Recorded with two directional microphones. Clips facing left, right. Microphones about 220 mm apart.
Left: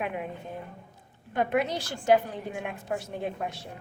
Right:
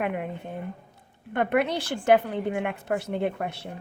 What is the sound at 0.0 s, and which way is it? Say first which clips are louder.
A woman's voice: right 4 dB; 60° right (ahead or behind).